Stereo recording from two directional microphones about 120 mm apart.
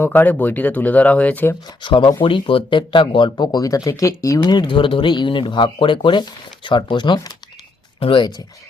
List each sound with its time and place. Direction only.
0.0 s speech: 15° left (ahead or behind)
1.8 s speech: 45° left (ahead or behind)